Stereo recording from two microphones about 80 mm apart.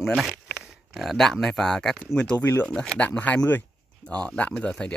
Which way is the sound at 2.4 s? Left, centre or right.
Left.